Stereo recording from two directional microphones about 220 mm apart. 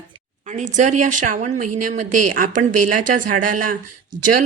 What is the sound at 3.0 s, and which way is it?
Speech, 35° right (ahead or behind).